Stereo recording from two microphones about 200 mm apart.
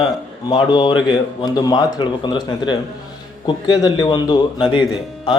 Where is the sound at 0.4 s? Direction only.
20° left (ahead or behind).